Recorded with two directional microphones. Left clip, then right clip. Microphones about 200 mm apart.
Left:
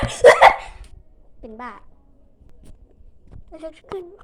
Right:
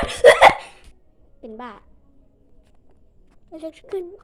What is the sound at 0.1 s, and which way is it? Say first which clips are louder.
Dog: left 1 dB; centre (ahead or behind).